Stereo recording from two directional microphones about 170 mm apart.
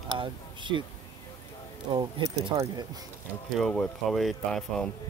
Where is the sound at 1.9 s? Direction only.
25° right (ahead or behind).